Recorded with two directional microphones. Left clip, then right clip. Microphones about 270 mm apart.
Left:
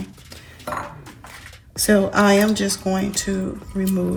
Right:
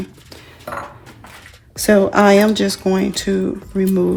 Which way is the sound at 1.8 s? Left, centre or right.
Right.